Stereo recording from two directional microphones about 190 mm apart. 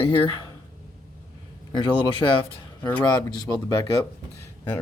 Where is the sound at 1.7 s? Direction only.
25° left (ahead or behind).